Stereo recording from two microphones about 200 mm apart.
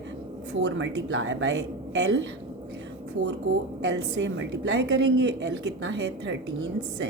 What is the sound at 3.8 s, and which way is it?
A woman's voice, 65° right (ahead or behind).